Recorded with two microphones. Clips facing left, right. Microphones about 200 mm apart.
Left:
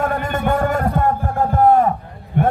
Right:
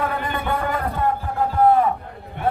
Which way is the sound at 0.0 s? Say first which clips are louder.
Left 5 dB; 45° left (ahead or behind).